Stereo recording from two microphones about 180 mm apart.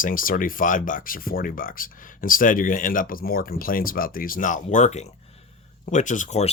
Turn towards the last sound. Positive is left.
turn(degrees=40)  # may be behind; listen again after turning